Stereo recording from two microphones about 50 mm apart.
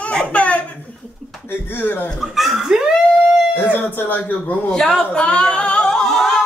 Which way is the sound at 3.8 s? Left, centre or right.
Left.